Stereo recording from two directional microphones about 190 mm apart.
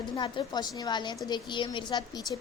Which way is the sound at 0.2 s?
25° left (ahead or behind).